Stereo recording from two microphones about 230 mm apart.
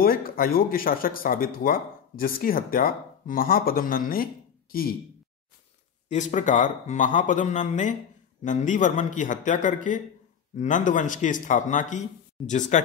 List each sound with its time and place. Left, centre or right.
0.0 s speech: left
6.0 s speech: left